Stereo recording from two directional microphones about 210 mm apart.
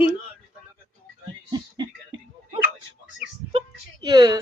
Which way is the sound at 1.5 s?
20° right (ahead or behind).